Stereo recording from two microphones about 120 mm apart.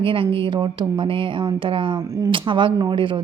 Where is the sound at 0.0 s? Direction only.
45° right (ahead or behind).